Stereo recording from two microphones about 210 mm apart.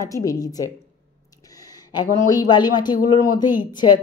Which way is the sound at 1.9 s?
20° left (ahead or behind).